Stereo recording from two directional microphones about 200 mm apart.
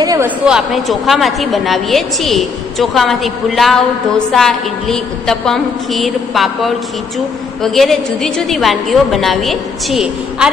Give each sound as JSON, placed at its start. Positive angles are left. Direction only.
{"t": 0.0, "sound": "a woman's voice", "side_deg": -15}
{"t": 0.5, "sound": "a woman's voice", "side_deg": 0}